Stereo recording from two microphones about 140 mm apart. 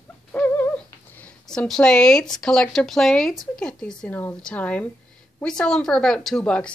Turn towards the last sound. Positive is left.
turn(degrees=10)  # may be behind; listen again after turning